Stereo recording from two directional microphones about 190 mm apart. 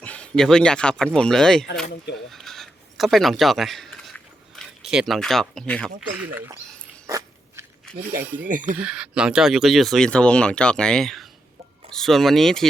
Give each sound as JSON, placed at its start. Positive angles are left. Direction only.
{"t": 0.0, "sound": "speech", "side_deg": 5}
{"t": 2.1, "sound": "a sound", "side_deg": 0}
{"t": 4.5, "sound": "speech", "side_deg": -5}
{"t": 6.0, "sound": "speech", "side_deg": -10}
{"t": 7.1, "sound": "biting", "side_deg": -15}
{"t": 7.9, "sound": "a sound", "side_deg": 5}
{"t": 8.2, "sound": "speech", "side_deg": -10}
{"t": 8.4, "sound": "speech", "side_deg": -45}
{"t": 8.8, "sound": "speech", "side_deg": -5}